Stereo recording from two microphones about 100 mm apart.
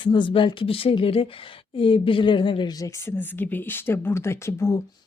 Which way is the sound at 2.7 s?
30° left (ahead or behind).